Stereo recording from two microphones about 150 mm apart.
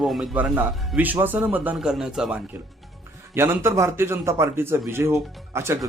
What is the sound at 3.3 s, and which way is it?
Speech, 15° right (ahead or behind).